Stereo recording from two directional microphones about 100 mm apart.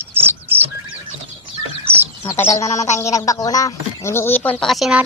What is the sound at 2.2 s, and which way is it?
Speech, 25° left (ahead or behind).